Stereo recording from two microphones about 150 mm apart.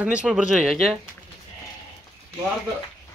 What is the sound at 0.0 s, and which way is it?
Speech, 5° right (ahead or behind).